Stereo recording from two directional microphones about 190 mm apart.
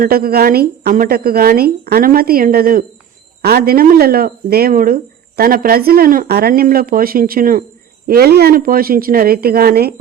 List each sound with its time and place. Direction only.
0.0 s speech: 50° right (ahead or behind)